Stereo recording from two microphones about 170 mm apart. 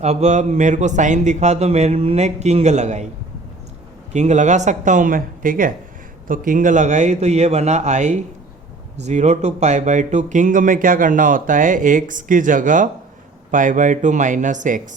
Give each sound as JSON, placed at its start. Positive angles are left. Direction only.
{"t": 0.0, "sound": "a man's voice", "side_deg": -40}
{"t": 4.1, "sound": "a man's voice", "side_deg": -45}